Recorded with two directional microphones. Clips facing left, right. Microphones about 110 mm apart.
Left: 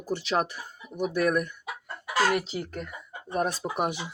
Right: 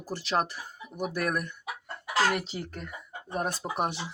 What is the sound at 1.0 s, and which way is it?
Speech, 45° right (ahead or behind).